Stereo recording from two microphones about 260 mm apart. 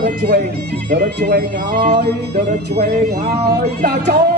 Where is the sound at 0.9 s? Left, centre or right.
Right.